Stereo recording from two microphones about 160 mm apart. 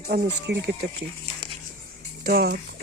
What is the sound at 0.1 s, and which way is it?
Speech, 90° right.